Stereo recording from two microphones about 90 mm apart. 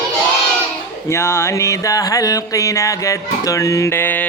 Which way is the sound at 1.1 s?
30° left (ahead or behind).